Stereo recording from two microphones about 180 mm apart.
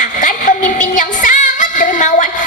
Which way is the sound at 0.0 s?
45° left (ahead or behind).